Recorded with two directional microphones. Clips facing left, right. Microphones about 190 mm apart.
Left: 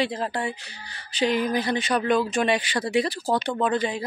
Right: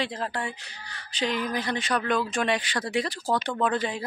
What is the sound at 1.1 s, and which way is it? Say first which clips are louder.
A woman's voice: left 5 dB; 10° left (ahead or behind).